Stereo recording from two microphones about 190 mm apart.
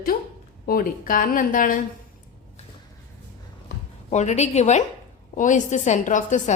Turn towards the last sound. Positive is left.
turn(degrees=40)  # may be behind; listen again after turning